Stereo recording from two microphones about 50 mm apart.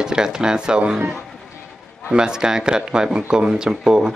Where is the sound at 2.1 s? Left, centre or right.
Centre.